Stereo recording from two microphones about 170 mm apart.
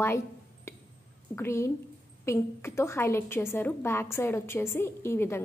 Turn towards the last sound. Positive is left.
turn(degrees=15)  # may be behind; listen again after turning